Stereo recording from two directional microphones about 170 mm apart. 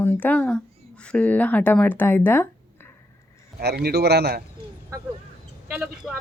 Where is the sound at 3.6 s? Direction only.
70° right (ahead or behind).